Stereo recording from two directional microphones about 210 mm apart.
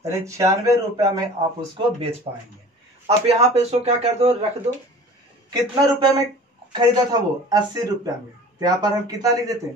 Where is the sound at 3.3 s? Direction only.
30° right (ahead or behind).